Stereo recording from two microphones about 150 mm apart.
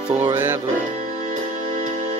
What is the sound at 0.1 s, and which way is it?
Music, 15° right (ahead or behind).